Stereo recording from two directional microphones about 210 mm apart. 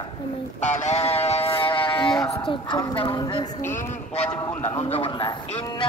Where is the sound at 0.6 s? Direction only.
35° left (ahead or behind).